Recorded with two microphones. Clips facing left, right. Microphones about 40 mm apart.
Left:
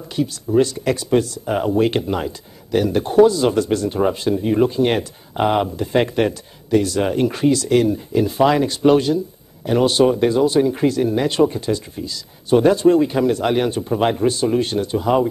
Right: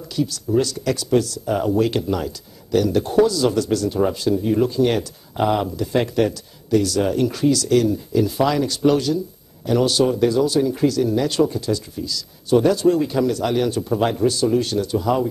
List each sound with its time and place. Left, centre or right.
0.1 s speech: left